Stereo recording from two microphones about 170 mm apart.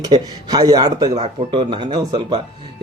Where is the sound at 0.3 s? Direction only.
25° right (ahead or behind).